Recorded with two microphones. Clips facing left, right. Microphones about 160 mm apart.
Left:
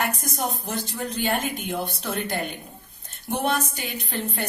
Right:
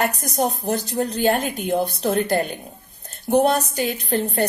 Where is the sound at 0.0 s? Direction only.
40° right (ahead or behind).